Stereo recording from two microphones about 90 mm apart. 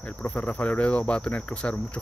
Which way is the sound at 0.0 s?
15° left (ahead or behind).